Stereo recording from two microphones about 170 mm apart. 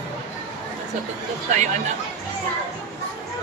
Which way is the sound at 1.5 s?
45° right (ahead or behind).